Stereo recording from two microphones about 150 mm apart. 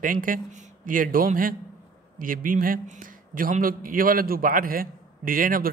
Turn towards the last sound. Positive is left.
turn(degrees=-70)  # may be behind; listen again after turning